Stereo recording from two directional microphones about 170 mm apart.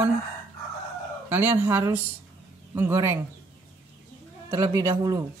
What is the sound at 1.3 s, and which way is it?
Speech, 10° right (ahead or behind).